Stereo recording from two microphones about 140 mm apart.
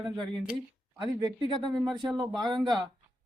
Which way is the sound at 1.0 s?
30° right (ahead or behind).